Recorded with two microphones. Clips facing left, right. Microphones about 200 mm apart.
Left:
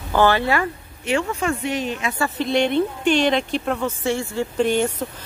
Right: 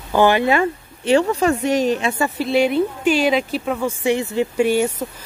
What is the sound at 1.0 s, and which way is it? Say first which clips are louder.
Speech: right 6 dB; 35° right (ahead or behind).